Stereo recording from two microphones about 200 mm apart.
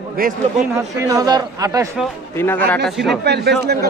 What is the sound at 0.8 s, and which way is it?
Speech, 15° right (ahead or behind).